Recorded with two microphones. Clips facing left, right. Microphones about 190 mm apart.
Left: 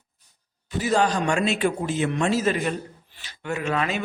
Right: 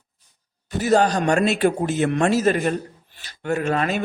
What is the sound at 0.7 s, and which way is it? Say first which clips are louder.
Speech: right 4 dB; 45° right (ahead or behind).